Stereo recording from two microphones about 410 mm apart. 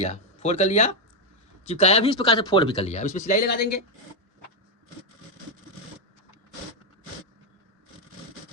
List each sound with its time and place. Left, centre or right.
0.0 s speech: centre